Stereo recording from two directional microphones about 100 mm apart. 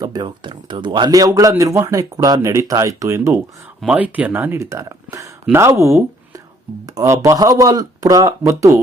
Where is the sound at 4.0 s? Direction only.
15° right (ahead or behind).